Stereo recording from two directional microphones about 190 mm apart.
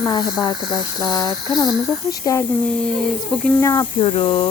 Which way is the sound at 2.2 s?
15° left (ahead or behind).